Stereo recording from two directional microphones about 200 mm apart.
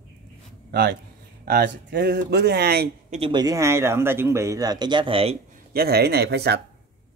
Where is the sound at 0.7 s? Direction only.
55° right (ahead or behind).